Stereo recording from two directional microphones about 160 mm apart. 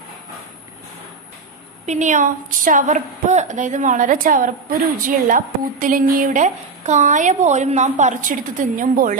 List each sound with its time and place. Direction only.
1.9 s a woman's voice: 50° right (ahead or behind)